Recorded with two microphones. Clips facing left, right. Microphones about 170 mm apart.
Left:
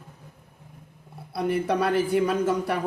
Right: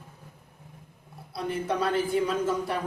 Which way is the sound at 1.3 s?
65° left (ahead or behind).